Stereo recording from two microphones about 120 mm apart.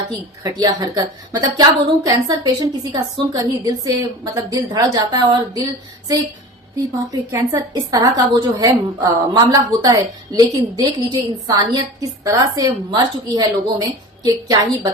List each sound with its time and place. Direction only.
0.6 s a woman's voice: 35° right (ahead or behind)
7.1 s a woman's voice: 30° right (ahead or behind)